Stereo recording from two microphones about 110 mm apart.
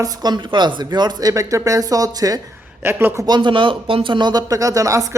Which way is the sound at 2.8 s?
20° right (ahead or behind).